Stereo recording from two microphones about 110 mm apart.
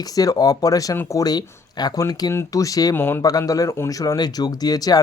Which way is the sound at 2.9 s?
20° left (ahead or behind).